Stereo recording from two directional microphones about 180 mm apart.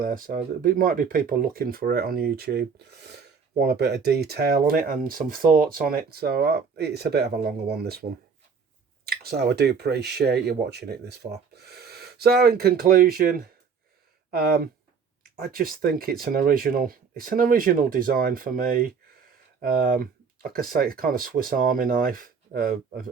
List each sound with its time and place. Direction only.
0.0 s speech: 50° right (ahead or behind)
9.0 s speech: 60° right (ahead or behind)